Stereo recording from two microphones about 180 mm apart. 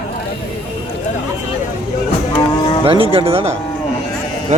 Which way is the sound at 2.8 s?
30° right (ahead or behind).